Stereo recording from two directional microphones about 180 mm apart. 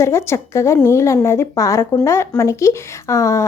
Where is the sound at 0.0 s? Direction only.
15° left (ahead or behind).